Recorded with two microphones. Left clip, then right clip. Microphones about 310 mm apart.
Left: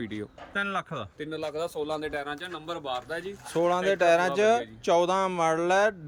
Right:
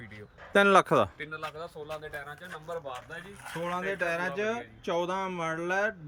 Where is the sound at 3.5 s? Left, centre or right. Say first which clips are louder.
Left 8 dB; centre.